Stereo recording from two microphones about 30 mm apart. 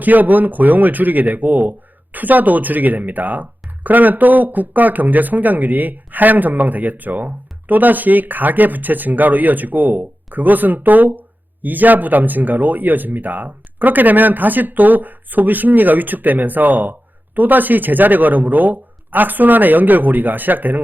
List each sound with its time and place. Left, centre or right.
0.0 s speech: right